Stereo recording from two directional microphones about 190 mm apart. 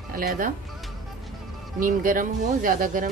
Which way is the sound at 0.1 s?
50° right (ahead or behind).